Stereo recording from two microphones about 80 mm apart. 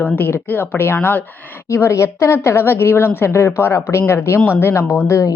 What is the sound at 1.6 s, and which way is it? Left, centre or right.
A woman's voice, left.